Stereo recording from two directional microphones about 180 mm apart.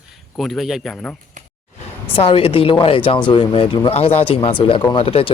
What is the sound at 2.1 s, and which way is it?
Speech, 30° left (ahead or behind).